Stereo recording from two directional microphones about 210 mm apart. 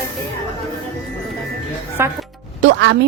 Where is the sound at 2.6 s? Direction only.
55° right (ahead or behind).